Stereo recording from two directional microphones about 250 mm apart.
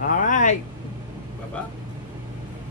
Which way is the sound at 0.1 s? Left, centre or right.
Left.